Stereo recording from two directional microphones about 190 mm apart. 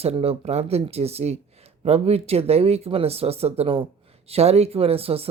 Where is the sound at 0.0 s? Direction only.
30° right (ahead or behind).